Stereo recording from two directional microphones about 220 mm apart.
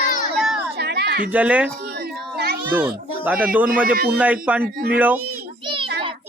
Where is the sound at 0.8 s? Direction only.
45° right (ahead or behind).